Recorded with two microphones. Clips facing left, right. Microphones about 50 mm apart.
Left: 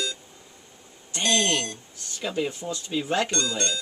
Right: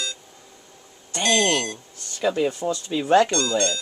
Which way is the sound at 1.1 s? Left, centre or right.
Right.